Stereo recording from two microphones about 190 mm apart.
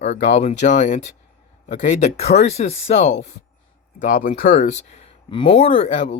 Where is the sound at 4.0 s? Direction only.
50° left (ahead or behind).